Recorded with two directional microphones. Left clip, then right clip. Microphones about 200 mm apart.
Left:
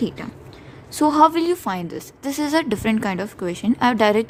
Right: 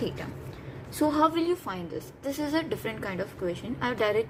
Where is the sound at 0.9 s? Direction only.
50° left (ahead or behind).